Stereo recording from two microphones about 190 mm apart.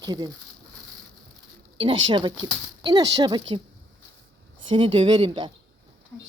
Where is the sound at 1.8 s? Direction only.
25° right (ahead or behind).